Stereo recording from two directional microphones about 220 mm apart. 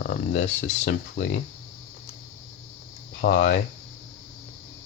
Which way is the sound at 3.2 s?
40° left (ahead or behind).